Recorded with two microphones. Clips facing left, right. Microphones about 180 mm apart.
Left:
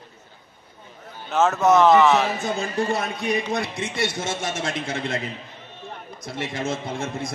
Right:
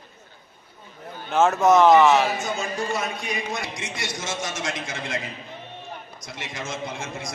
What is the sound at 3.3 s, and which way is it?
A man's voice, 55° left (ahead or behind).